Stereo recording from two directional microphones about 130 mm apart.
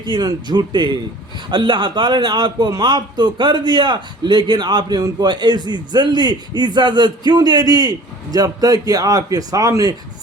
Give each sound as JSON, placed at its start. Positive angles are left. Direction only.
{"t": 0.0, "sound": "a man's voice", "side_deg": -35}